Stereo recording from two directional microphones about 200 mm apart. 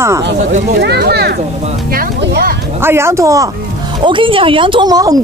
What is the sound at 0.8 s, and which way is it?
Speech, 55° right (ahead or behind).